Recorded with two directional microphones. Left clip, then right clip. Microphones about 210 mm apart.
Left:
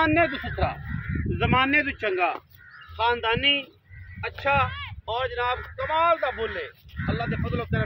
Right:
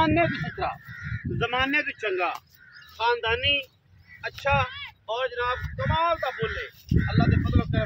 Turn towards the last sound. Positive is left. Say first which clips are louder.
# right 1 dB
turn(degrees=40)  # may be behind; listen again after turning